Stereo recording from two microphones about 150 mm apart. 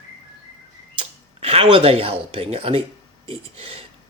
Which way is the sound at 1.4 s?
40° right (ahead or behind).